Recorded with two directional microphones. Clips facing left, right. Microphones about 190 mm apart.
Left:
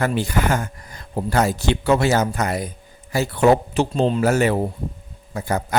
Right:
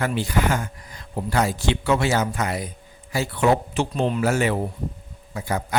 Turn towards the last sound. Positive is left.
turn(degrees=45)  # may be behind; listen again after turning